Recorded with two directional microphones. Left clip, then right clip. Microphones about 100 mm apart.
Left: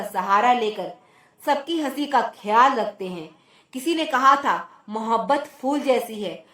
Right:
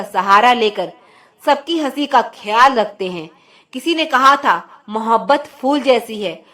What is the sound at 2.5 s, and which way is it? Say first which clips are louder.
Speech: right 5 dB; 45° right (ahead or behind).